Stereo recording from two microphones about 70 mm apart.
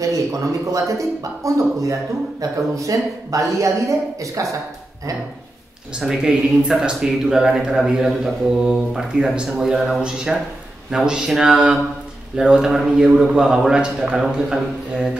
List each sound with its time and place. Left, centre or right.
0.0 s speech: right
5.9 s a man's voice: centre